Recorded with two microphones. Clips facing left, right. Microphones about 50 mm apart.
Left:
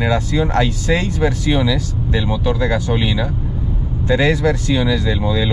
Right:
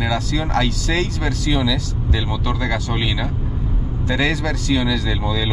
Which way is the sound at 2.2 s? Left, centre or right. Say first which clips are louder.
Left 6 dB; centre.